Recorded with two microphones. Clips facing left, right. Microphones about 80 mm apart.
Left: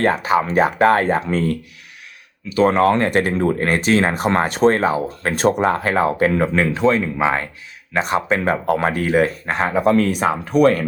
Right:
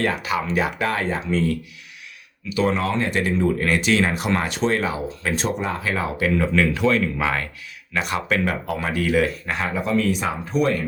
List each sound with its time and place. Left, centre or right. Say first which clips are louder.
0.0 s speech: left 6 dB; left
8.6 s speech: left 5 dB; left